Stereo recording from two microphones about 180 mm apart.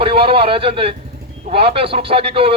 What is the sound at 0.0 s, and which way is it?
Speech, 30° right (ahead or behind).